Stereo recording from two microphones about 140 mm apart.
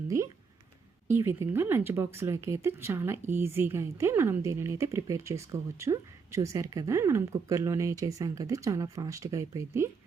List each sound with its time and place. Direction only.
1.0 s speech: 20° right (ahead or behind)